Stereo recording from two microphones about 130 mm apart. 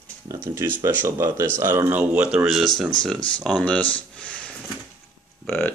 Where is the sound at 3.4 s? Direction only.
5° left (ahead or behind).